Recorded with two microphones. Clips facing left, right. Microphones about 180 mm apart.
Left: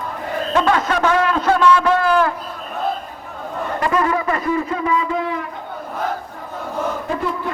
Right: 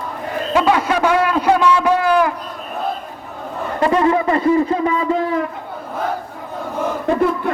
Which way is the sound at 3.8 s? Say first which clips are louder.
Right 5 dB; 25° right (ahead or behind).